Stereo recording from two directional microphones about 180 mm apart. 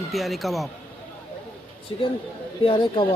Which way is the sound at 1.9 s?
25° left (ahead or behind).